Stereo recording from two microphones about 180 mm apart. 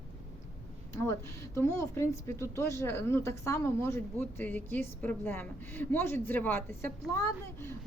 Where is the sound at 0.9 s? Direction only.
15° left (ahead or behind).